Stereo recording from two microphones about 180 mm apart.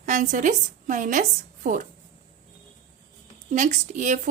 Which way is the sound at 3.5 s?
45° right (ahead or behind).